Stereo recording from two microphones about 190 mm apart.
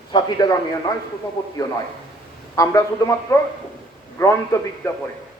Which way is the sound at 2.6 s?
15° left (ahead or behind).